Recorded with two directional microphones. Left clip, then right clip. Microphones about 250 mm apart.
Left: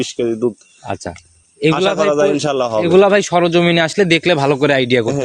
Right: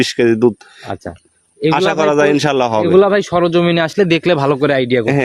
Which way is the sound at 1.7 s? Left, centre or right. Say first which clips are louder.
Right 3 dB; right.